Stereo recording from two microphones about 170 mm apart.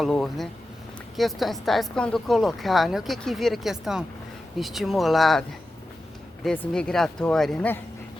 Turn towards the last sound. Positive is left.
turn(degrees=5)  # may be behind; listen again after turning